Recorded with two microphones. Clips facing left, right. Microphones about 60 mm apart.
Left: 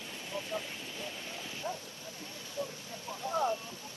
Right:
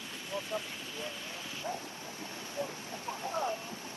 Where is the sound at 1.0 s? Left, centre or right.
Right.